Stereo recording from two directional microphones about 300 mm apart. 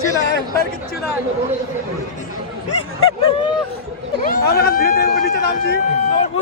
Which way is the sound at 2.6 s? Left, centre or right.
Left.